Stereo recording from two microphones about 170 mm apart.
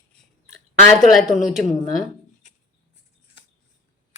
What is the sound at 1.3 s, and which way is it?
Speech, centre (ahead or behind).